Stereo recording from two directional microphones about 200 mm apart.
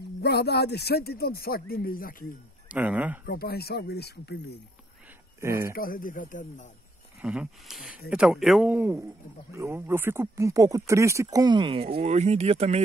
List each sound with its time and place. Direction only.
0.2 s speech: 55° left (ahead or behind)
2.7 s speech: 5° right (ahead or behind)
3.3 s speech: 50° left (ahead or behind)
5.4 s speech: 15° right (ahead or behind)
5.8 s speech: 45° left (ahead or behind)
7.2 s speech: 5° right (ahead or behind)
8.7 s speech: 10° right (ahead or behind); by 12.8 s 30° right (ahead or behind)